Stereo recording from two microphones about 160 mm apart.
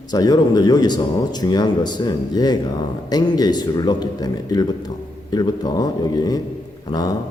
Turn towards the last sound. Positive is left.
turn(degrees=25)  # may be behind; listen again after turning